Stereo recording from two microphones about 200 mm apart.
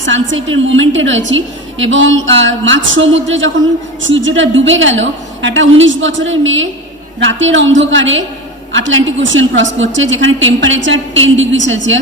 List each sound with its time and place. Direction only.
0.0 s a woman's voice: 70° right (ahead or behind)